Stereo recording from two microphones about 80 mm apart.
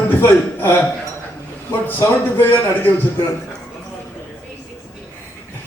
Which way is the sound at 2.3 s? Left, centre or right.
Left.